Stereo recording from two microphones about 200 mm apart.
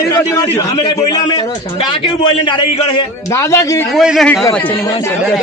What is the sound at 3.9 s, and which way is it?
A man's voice, centre (ahead or behind).